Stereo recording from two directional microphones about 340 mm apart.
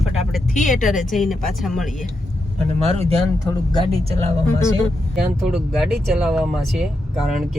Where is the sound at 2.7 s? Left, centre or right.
Centre.